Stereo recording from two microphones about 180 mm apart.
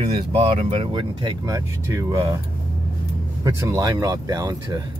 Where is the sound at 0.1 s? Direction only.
35° right (ahead or behind); by 2.3 s 15° right (ahead or behind).